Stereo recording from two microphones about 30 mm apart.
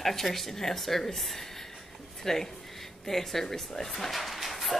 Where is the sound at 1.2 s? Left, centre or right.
Centre.